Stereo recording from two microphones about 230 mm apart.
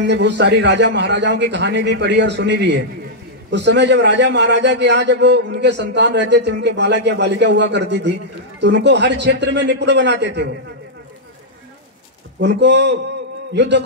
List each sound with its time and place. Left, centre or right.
0.0 s a man's voice: right
12.4 s a man's voice: right